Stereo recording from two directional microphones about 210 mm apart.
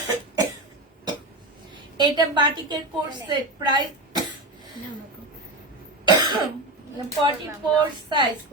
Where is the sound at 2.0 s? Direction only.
20° right (ahead or behind).